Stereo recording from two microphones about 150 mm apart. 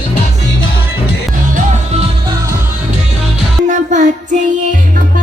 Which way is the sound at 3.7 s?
55° right (ahead or behind).